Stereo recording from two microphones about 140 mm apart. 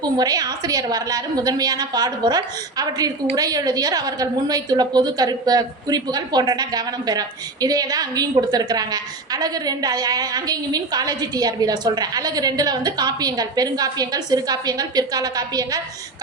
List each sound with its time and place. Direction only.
0.0 s a woman's voice: 30° right (ahead or behind)